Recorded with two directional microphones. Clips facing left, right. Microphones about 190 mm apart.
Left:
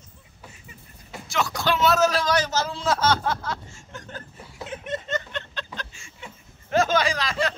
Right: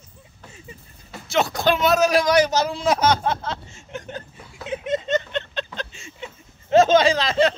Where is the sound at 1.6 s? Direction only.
15° right (ahead or behind).